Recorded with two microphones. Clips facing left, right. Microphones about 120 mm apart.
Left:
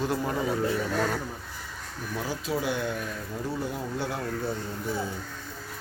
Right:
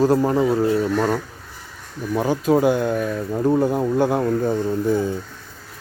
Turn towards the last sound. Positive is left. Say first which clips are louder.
# right 12 dB
turn(degrees=-50)  # may be behind; listen again after turning